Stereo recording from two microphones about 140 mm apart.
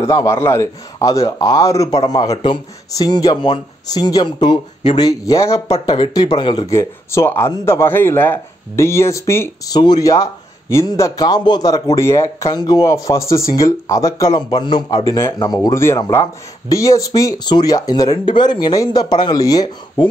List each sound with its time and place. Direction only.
0.0 s a man's voice: 20° left (ahead or behind)
6.7 s a man's voice: 20° left (ahead or behind)